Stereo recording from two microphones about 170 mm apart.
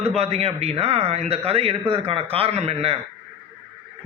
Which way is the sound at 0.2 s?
35° right (ahead or behind).